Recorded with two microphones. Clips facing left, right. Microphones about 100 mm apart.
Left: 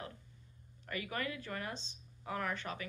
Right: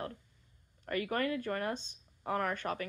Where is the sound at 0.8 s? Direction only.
45° right (ahead or behind).